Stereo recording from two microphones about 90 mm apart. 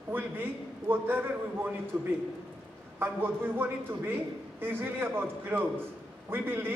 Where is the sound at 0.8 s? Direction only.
25° right (ahead or behind).